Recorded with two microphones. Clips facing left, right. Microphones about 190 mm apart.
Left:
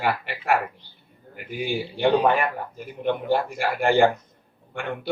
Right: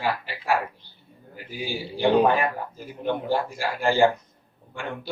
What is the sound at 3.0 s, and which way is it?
Speech, 60° left (ahead or behind).